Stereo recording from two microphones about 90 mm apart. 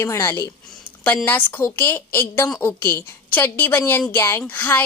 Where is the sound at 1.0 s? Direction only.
20° left (ahead or behind).